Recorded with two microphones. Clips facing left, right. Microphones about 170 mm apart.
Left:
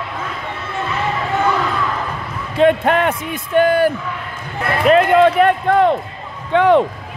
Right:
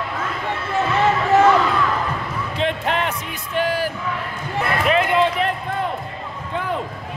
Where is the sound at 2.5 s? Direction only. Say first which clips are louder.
Left 10 dB; 50° left (ahead or behind).